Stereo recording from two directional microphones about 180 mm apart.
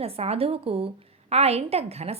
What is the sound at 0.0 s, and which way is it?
Speech, 35° right (ahead or behind).